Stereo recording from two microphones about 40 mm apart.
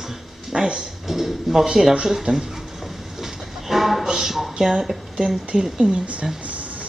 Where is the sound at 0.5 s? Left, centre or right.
Centre.